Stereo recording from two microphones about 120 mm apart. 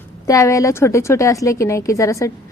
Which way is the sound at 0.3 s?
25° left (ahead or behind).